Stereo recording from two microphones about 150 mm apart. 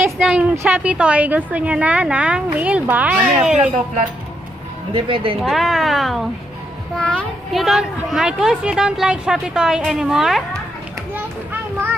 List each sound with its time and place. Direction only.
0.0 s a sound: 5° right (ahead or behind)
0.6 s a woman's voice: 10° right (ahead or behind)
4.9 s speech: 35° right (ahead or behind)
5.4 s speech: centre (ahead or behind)